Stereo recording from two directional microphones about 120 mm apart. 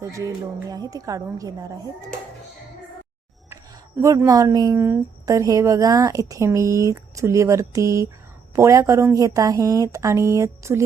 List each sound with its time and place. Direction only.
0.0 s a woman's voice: 25° right (ahead or behind)
4.0 s a woman's voice: 25° right (ahead or behind)